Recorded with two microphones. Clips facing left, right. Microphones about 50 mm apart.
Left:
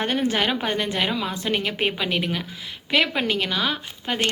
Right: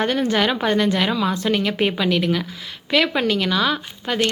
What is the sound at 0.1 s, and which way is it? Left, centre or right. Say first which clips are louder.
A woman's voice: right 3 dB; centre.